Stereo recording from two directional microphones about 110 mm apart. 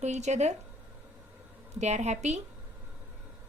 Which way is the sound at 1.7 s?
90° right.